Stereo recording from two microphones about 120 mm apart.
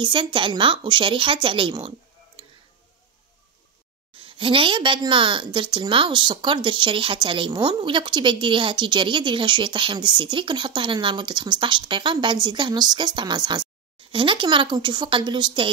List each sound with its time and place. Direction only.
0.0 s speech: 40° right (ahead or behind)
4.1 s a woman's voice: 45° right (ahead or behind)